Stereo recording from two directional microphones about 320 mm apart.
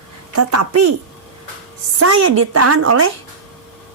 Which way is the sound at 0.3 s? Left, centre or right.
Right.